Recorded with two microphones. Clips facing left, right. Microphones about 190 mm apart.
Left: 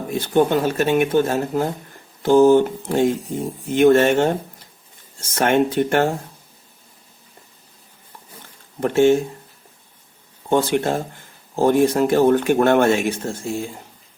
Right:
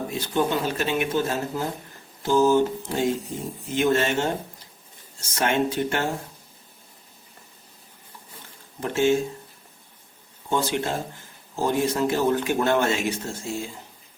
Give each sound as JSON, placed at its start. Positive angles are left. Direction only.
{"t": 0.1, "sound": "speech", "side_deg": 55}
{"t": 5.3, "sound": "speech", "side_deg": 55}
{"t": 8.8, "sound": "speech", "side_deg": 55}
{"t": 10.5, "sound": "speech", "side_deg": 60}